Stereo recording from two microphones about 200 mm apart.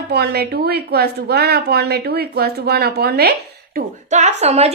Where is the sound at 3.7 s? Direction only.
35° right (ahead or behind).